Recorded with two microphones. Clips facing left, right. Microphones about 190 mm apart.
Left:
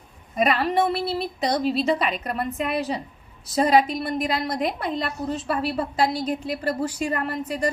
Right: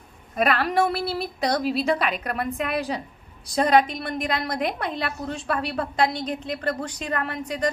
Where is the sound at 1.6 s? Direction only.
Centre (ahead or behind).